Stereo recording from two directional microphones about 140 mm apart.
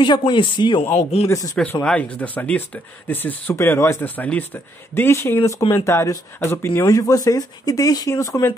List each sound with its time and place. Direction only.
0.0 s speech: 35° left (ahead or behind)
0.9 s speech: 50° left (ahead or behind)
1.3 s speech: 20° left (ahead or behind)
1.6 s speech: 10° left (ahead or behind)